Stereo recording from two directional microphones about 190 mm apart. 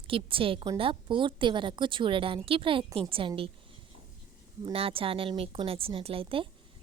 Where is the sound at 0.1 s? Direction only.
30° right (ahead or behind).